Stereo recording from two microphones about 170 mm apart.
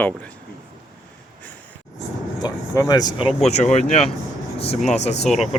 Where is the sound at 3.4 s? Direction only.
40° left (ahead or behind).